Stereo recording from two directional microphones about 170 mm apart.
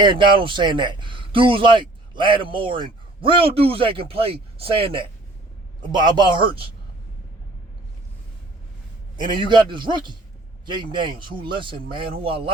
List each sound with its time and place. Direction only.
0.0 s speech: 30° right (ahead or behind)
9.3 s speech: 25° right (ahead or behind)